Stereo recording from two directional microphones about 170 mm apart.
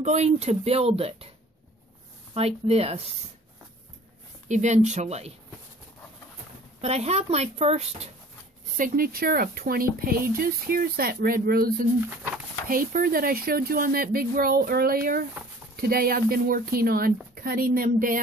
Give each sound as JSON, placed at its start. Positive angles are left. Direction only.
{"t": 0.0, "sound": "speech", "side_deg": -40}
{"t": 2.3, "sound": "speech", "side_deg": -35}
{"t": 4.5, "sound": "speech", "side_deg": -45}
{"t": 6.8, "sound": "speech", "side_deg": -40}
{"t": 8.7, "sound": "speech", "side_deg": -55}